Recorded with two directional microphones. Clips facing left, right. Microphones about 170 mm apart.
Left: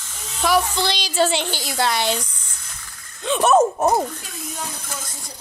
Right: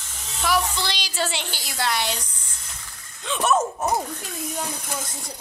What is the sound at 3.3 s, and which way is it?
Speech, 45° left (ahead or behind).